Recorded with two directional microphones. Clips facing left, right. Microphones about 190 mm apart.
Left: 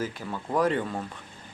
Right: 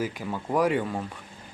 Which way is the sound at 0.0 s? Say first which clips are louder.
Right 2 dB; 15° right (ahead or behind).